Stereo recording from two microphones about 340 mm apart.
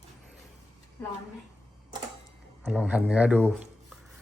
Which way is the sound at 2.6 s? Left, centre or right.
Centre.